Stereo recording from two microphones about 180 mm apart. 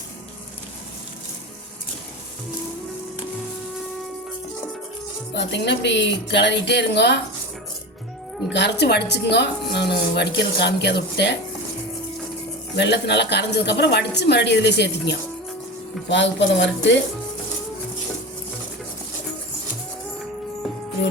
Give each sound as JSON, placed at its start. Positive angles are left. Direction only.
{"t": 5.3, "sound": "speech", "side_deg": 75}
{"t": 8.5, "sound": "speech", "side_deg": 70}
{"t": 12.7, "sound": "speech", "side_deg": 70}
{"t": 16.0, "sound": "speech", "side_deg": 85}